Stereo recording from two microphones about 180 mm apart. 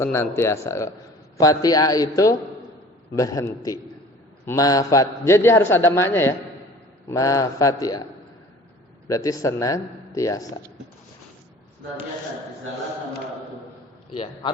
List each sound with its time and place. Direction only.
0.0 s a man's voice: 15° left (ahead or behind)
9.0 s a man's voice: 20° left (ahead or behind)